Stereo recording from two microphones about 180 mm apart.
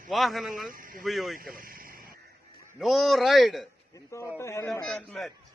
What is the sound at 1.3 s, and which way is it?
Vehicle, 50° right (ahead or behind).